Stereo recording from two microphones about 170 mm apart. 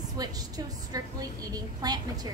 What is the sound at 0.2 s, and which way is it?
A woman's voice, 20° right (ahead or behind).